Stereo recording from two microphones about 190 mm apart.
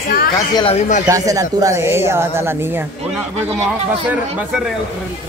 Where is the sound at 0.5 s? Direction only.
30° left (ahead or behind).